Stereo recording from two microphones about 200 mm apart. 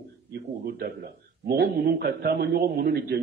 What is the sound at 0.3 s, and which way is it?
A man's voice, 50° right (ahead or behind).